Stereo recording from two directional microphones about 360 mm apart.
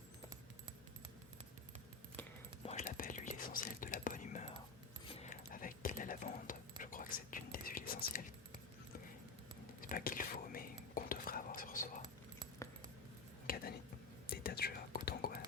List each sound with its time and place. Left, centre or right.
2.6 s whispering: centre
5.0 s dog: centre
9.9 s whispering: left
13.5 s whispering: left